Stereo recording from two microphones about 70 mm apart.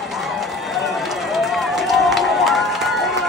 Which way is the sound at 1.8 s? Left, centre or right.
Centre.